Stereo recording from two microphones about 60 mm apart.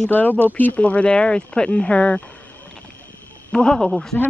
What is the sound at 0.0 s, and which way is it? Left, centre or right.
Speech, left.